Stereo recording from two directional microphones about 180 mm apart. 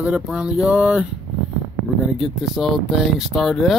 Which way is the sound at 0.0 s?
5° right (ahead or behind).